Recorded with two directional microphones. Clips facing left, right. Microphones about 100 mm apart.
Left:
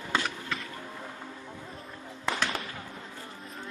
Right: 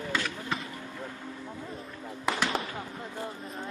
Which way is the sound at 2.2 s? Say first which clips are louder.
Right 2 dB; 10° right (ahead or behind).